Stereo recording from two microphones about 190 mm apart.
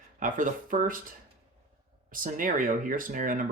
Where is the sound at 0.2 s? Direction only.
45° right (ahead or behind).